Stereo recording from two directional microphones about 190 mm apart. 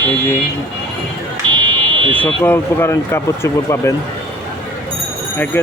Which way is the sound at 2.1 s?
10° left (ahead or behind).